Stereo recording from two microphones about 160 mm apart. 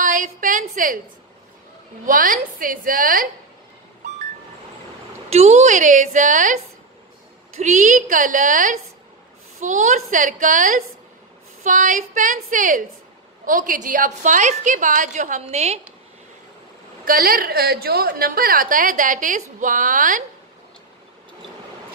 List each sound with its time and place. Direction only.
0.0 s a sound: 55° right (ahead or behind)
2.0 s a woman's voice: 60° right (ahead or behind)
5.3 s a woman's voice: 40° right (ahead or behind)
17.0 s a woman's voice: 65° right (ahead or behind)